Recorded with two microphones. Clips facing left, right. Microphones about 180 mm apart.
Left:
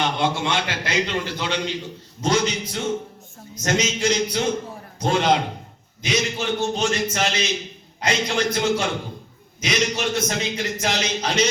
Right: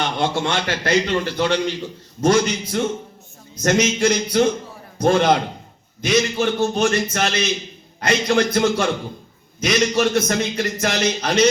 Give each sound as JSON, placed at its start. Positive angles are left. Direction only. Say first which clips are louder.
{"t": 0.2, "sound": "a man's voice", "louder": "right 2 dB", "side_deg": -50}